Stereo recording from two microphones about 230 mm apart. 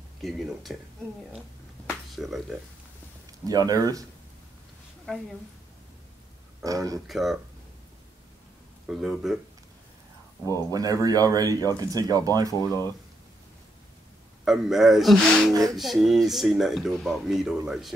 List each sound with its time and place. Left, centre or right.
0.2 s speech: centre
1.9 s a sound: centre
3.4 s speech: centre
6.6 s speech: centre
7.1 s speech: centre
8.8 s speech: centre
10.7 s speech: centre
12.5 s speech: centre
14.4 s speech: centre